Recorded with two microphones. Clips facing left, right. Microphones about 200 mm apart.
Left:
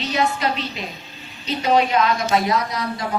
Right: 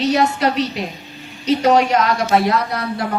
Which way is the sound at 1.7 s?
85° right.